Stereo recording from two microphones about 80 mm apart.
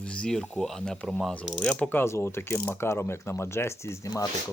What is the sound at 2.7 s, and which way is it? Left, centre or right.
Speech, left.